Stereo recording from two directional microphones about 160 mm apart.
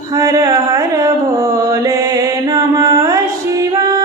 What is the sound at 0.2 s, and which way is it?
Mantra, 20° right (ahead or behind).